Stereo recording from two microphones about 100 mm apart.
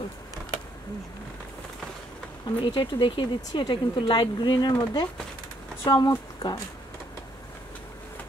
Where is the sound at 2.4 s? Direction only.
50° left (ahead or behind).